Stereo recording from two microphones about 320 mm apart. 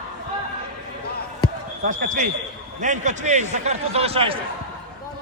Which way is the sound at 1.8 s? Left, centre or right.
Right.